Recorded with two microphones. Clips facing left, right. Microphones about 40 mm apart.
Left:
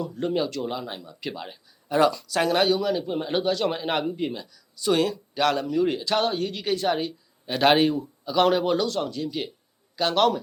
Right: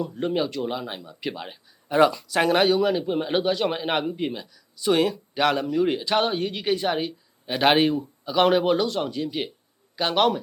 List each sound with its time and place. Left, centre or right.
0.0 s speech: centre